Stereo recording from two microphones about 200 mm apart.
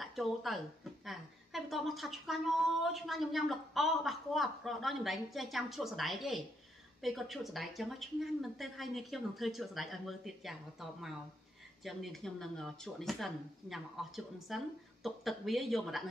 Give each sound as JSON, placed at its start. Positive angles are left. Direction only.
{"t": 0.0, "sound": "a woman's voice", "side_deg": 0}